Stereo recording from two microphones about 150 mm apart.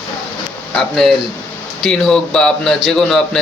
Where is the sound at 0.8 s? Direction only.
5° left (ahead or behind).